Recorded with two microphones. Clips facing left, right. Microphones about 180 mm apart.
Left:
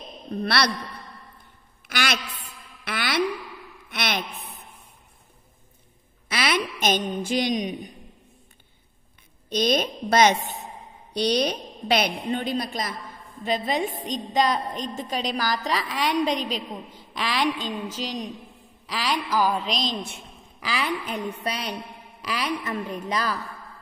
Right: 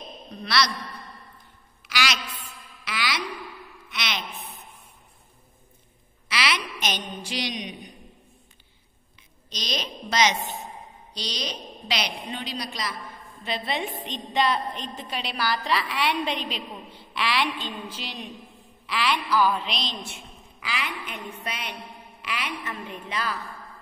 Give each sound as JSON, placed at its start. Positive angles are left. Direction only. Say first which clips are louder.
{"t": 0.3, "sound": "a woman's voice", "louder": "left 2 dB", "side_deg": 60}
{"t": 1.9, "sound": "a woman's voice", "louder": "left 1 dB", "side_deg": 55}
{"t": 6.2, "sound": "a woman's voice", "louder": "left 3 dB", "side_deg": 50}
{"t": 9.5, "sound": "a woman's voice", "louder": "left 10 dB", "side_deg": 55}